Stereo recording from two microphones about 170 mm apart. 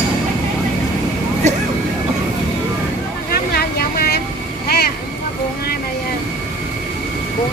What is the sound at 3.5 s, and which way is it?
Vehicle, 65° left (ahead or behind).